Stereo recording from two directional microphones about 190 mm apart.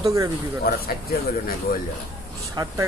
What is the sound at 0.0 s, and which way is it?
Speech, 20° right (ahead or behind).